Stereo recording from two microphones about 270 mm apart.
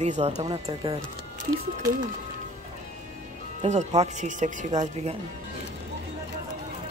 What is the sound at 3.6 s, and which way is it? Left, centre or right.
Speech, right.